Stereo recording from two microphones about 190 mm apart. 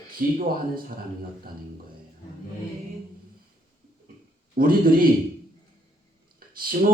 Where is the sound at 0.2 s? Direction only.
50° right (ahead or behind).